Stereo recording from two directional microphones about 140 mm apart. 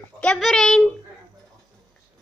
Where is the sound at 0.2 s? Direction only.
5° left (ahead or behind).